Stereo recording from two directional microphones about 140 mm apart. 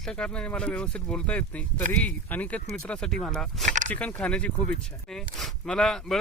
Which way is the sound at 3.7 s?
60° right (ahead or behind).